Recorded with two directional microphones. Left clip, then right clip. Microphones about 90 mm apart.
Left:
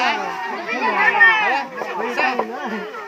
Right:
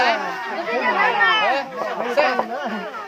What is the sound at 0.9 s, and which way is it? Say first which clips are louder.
Speech: left 5 dB; 40° right (ahead or behind).